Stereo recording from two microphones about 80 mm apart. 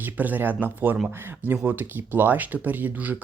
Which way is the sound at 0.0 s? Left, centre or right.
Right.